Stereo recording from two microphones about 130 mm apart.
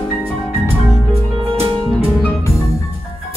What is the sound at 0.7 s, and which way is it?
Music, 50° right (ahead or behind).